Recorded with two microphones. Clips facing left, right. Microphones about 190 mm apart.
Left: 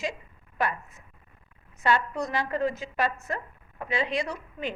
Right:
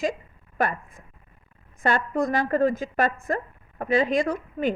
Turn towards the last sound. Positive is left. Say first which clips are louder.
# right 7 dB
turn(degrees=-50)  # may be behind; listen again after turning